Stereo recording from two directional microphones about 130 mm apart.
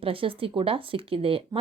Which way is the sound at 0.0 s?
45° right (ahead or behind).